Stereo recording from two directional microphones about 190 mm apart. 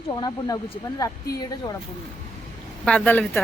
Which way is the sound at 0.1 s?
20° left (ahead or behind).